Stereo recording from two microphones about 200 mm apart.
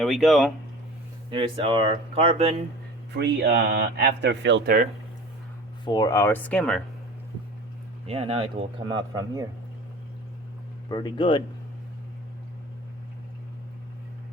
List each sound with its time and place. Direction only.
0.0 s speech: centre (ahead or behind)
1.3 s speech: 25° right (ahead or behind)
3.2 s speech: 55° right (ahead or behind)
5.8 s speech: 20° left (ahead or behind); by 6.8 s 5° left (ahead or behind)
8.0 s speech: 30° right (ahead or behind)
10.8 s speech: 20° left (ahead or behind)